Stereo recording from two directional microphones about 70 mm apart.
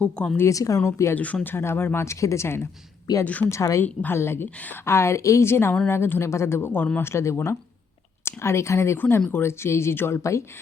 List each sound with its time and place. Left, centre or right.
0.3 s speech: left
1.1 s speech: left
1.5 s speech: left
3.2 s speech: left
3.5 s speech: left
3.8 s speech: left
4.4 s speech: left
4.9 s speech: left
7.0 s speech: left
10.2 s speech: left